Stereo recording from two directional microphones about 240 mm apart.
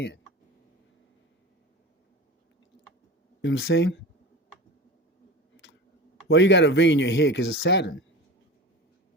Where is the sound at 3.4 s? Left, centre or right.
Left.